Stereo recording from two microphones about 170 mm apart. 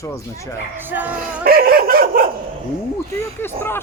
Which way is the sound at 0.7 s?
10° right (ahead or behind).